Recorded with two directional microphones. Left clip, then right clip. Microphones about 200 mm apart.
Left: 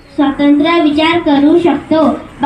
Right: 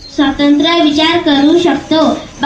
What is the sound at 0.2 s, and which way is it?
A child's voice, 35° left (ahead or behind).